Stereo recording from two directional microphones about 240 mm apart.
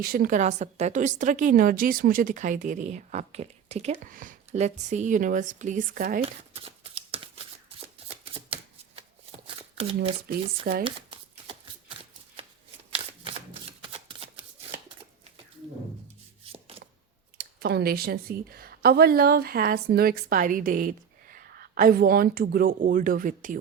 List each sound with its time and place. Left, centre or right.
0.0 s a woman's voice: right
6.2 s shuffling cards: right
17.3 s a woman's voice: right